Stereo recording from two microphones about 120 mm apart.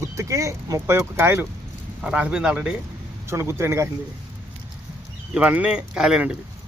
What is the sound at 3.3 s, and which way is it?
Speech, 20° right (ahead or behind).